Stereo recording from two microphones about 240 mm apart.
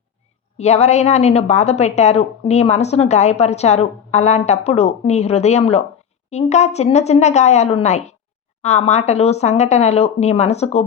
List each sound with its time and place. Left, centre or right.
0.5 s a woman's voice: left